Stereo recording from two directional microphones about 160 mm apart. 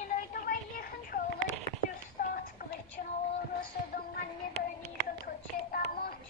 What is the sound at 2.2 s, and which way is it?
Music, 65° left (ahead or behind).